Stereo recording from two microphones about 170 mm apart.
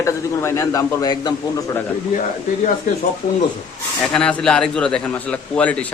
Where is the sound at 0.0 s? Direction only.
20° left (ahead or behind).